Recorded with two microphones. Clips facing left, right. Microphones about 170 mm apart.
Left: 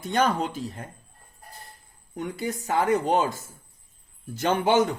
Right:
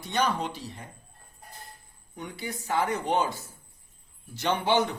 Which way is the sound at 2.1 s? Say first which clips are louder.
Left 7 dB; 45° left (ahead or behind).